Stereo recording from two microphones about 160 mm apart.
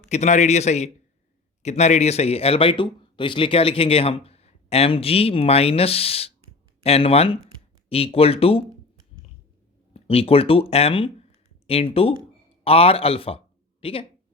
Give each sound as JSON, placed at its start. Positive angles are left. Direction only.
{"t": 0.1, "sound": "a man's voice", "side_deg": 45}
{"t": 9.9, "sound": "a man's voice", "side_deg": 35}